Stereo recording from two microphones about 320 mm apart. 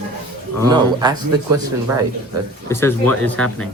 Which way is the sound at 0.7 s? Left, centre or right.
Centre.